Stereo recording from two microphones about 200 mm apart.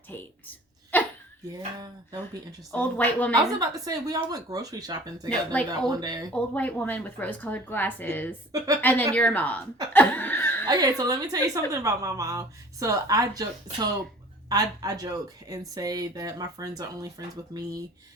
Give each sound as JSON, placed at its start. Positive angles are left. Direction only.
{"t": 0.1, "sound": "a woman's voice", "side_deg": 10}
{"t": 0.9, "sound": "a sound", "side_deg": 10}
{"t": 1.8, "sound": "speech", "side_deg": -20}
{"t": 2.7, "sound": "a woman's voice", "side_deg": 5}
{"t": 3.6, "sound": "speech", "side_deg": -20}
{"t": 6.3, "sound": "a woman's voice", "side_deg": 5}
{"t": 8.5, "sound": "speech", "side_deg": -15}
{"t": 8.8, "sound": "a woman's voice", "side_deg": 10}
{"t": 9.9, "sound": "chuckle", "side_deg": 10}
{"t": 10.7, "sound": "speech", "side_deg": -20}